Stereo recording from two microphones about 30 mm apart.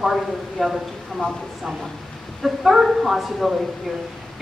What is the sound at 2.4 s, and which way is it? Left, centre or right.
A woman's voice, centre.